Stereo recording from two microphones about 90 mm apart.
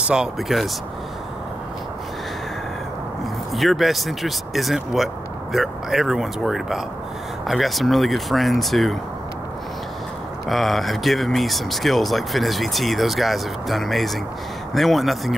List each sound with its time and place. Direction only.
0.1 s speech: 5° right (ahead or behind)
3.5 s speech: centre (ahead or behind)
10.4 s speech: centre (ahead or behind)